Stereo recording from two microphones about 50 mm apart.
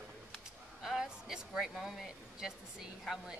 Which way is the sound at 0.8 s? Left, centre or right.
Centre.